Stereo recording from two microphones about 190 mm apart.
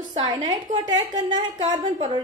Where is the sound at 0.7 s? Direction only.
40° right (ahead or behind).